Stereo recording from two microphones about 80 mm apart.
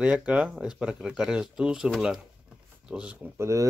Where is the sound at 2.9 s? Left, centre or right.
Centre.